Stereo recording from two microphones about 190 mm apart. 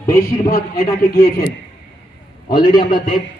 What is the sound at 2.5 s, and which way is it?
Speech, 20° left (ahead or behind).